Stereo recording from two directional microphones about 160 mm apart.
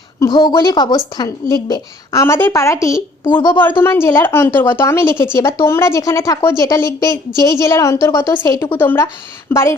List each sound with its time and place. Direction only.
0.2 s a woman's voice: 25° left (ahead or behind)